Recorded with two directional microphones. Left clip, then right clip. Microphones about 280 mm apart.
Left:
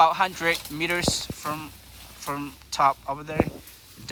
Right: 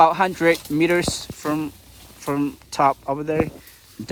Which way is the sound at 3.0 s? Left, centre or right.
Right.